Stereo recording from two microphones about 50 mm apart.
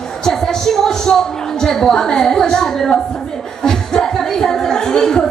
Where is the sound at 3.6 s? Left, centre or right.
Centre.